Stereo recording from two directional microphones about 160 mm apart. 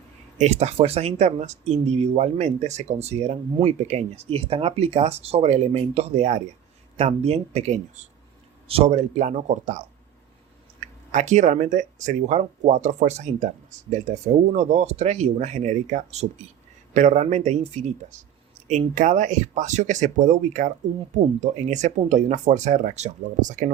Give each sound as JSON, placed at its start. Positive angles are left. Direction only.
{"t": 0.3, "sound": "speech", "side_deg": -45}